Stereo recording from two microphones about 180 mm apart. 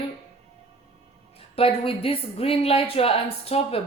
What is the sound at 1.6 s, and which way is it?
A woman's voice, 30° left (ahead or behind).